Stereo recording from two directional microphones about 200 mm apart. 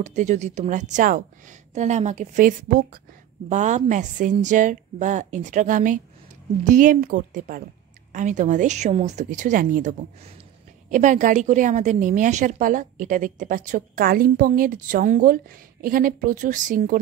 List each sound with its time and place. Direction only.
0.0 s a woman's voice: 35° right (ahead or behind)